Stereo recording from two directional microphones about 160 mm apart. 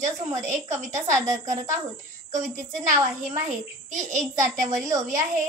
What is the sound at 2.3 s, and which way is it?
A child's voice, 50° right (ahead or behind).